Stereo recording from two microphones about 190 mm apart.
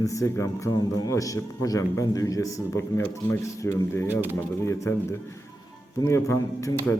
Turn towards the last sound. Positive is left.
turn(degrees=15)  # may be behind; listen again after turning